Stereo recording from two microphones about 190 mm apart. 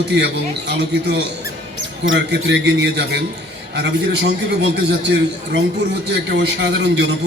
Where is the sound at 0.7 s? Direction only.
65° right (ahead or behind).